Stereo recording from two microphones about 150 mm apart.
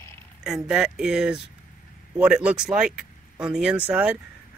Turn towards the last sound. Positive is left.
turn(degrees=-10)  # may be behind; listen again after turning